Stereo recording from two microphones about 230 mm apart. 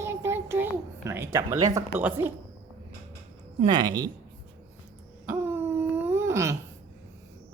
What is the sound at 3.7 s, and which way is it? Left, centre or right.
Speech, centre.